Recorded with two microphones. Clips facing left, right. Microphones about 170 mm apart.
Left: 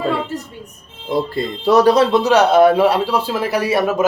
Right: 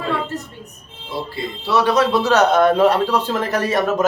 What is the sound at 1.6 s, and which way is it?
Speech, 45° left (ahead or behind).